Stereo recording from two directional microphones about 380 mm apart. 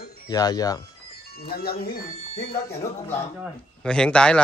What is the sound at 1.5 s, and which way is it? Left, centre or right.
Speech, left.